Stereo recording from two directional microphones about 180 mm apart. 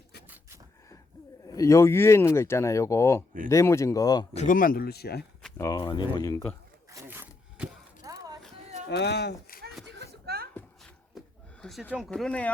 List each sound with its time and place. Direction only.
1.5 s speech: 20° left (ahead or behind)
4.4 s speech: 50° left (ahead or behind)
5.5 s speech: 20° left (ahead or behind)
6.9 s a sound: 15° right (ahead or behind)
8.9 s speech: 70° left (ahead or behind)
9.8 s a sound: 65° right (ahead or behind)
11.6 s speech: centre (ahead or behind)